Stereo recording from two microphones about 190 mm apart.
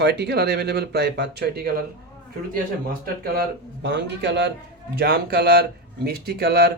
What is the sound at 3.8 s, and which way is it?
Speech, 65° right (ahead or behind).